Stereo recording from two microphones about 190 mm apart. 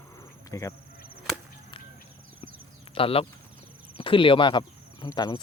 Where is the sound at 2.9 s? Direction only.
30° left (ahead or behind).